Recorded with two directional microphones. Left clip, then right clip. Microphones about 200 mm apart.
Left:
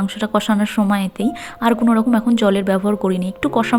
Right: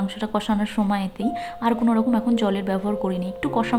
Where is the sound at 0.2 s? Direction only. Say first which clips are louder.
Left 7 dB; 20° left (ahead or behind).